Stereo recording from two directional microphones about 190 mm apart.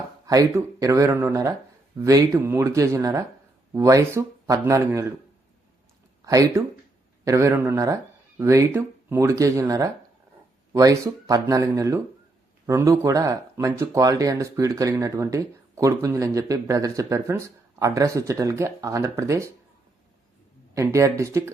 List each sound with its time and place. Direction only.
0.3 s speech: 20° right (ahead or behind)
6.2 s speech: 15° right (ahead or behind)
20.7 s speech: 15° right (ahead or behind)